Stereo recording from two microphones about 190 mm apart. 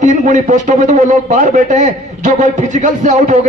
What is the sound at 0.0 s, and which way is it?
A man's voice, 40° right (ahead or behind).